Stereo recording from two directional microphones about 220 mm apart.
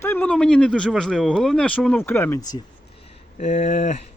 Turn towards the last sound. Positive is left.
turn(degrees=35)  # may be behind; listen again after turning